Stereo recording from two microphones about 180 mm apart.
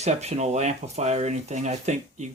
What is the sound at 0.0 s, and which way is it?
Speech, 40° right (ahead or behind).